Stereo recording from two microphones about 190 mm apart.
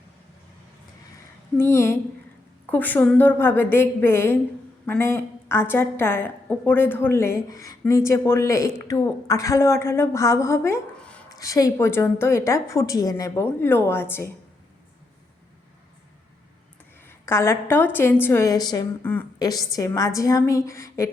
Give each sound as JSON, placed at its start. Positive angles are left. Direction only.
{"t": 1.5, "sound": "a woman's voice", "side_deg": 15}
{"t": 17.1, "sound": "a woman's voice", "side_deg": 15}